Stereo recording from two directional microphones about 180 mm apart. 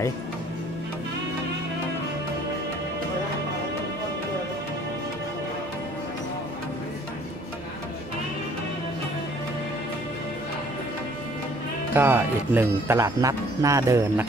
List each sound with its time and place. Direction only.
11.9 s speech: 10° right (ahead or behind)